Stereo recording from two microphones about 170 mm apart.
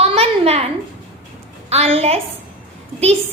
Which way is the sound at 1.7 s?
35° right (ahead or behind).